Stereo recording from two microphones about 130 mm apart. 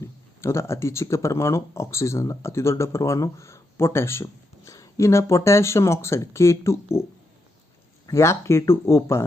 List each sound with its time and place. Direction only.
0.4 s speech: 20° left (ahead or behind)